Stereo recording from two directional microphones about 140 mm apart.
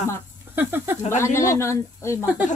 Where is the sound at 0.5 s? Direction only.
15° right (ahead or behind).